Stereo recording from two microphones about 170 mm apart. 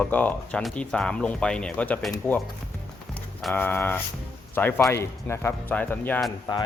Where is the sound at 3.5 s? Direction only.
10° left (ahead or behind).